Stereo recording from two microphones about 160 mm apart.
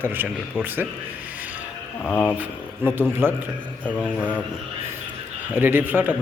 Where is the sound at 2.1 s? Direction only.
10° left (ahead or behind).